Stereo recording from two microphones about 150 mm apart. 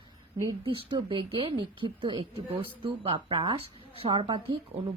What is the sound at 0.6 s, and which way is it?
Speech, 35° right (ahead or behind).